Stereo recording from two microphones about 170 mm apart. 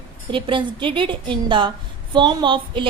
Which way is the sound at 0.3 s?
30° right (ahead or behind).